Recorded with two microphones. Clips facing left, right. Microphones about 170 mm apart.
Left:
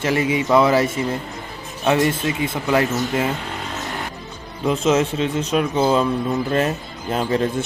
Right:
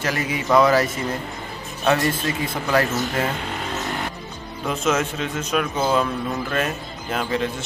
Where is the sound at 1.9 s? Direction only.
20° left (ahead or behind).